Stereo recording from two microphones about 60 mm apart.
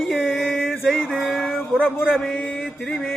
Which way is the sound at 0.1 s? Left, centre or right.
Centre.